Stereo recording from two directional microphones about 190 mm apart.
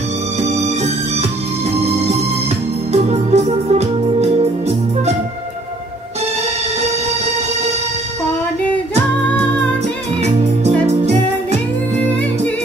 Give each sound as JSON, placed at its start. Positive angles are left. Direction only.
{"t": 0.4, "sound": "organ", "side_deg": -35}
{"t": 2.9, "sound": "organ", "side_deg": -35}
{"t": 10.2, "sound": "music", "side_deg": -35}